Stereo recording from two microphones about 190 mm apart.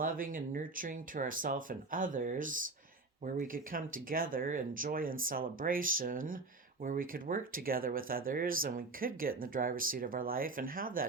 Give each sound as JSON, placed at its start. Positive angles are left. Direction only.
{"t": 0.0, "sound": "speech", "side_deg": -45}